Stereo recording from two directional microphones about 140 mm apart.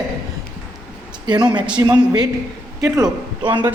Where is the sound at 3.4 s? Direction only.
35° right (ahead or behind).